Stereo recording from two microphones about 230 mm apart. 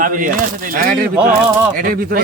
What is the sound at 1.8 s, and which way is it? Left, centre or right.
Speech, right.